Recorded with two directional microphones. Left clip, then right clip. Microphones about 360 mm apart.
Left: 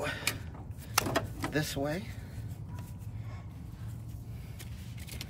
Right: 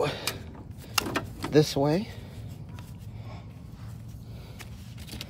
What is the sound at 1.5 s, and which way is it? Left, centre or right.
Speech, centre.